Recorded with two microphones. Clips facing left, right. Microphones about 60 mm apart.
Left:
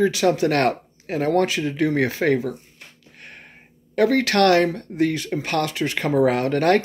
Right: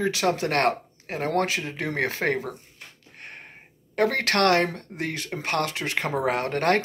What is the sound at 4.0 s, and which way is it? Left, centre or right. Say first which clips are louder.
Speech: left 5 dB; right.